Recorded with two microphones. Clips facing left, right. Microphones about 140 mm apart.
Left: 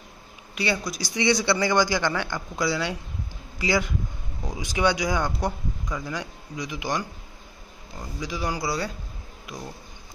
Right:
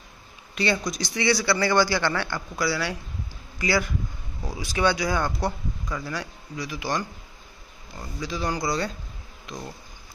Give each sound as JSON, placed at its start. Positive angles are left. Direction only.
{"t": 0.6, "sound": "speech", "side_deg": 10}
{"t": 1.1, "sound": "a man's voice", "side_deg": 20}